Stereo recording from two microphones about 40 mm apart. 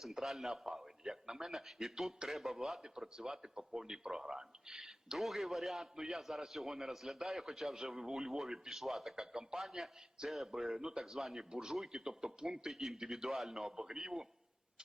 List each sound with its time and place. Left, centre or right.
0.0 s a man's voice: centre
5.1 s a man's voice: centre
11.5 s speech: centre